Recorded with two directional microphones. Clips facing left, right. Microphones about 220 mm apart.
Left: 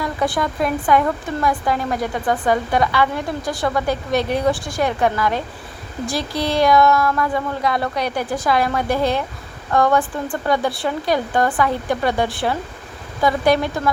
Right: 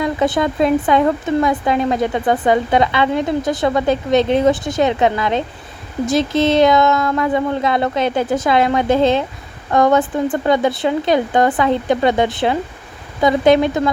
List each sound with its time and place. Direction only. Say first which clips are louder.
0.0 s speech: right 5 dB; 20° right (ahead or behind)